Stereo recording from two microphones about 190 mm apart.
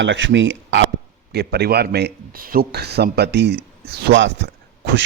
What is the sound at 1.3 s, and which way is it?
Speech, 60° right (ahead or behind).